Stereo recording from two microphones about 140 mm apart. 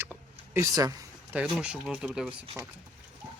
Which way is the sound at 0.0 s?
15° right (ahead or behind).